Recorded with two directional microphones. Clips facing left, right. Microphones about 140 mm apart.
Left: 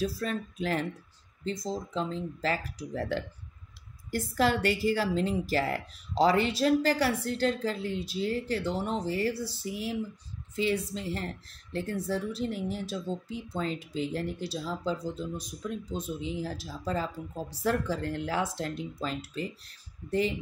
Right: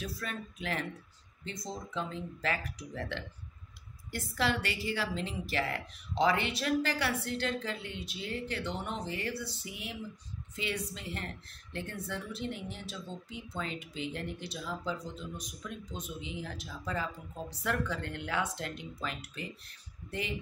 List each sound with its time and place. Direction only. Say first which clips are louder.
0.0 s a woman's voice: left 8 dB; 35° left (ahead or behind)